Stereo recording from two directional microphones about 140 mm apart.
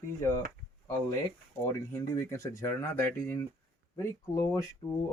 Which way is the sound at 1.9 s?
20° left (ahead or behind).